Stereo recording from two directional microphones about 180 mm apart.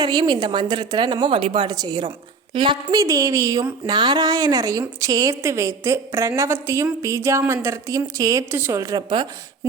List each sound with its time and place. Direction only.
0.0 s a woman's voice: 25° right (ahead or behind)